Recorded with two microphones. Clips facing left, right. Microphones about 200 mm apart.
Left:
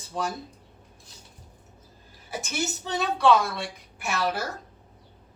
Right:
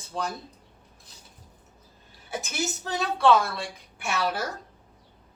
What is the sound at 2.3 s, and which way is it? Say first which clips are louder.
A woman's voice: even; centre (ahead or behind).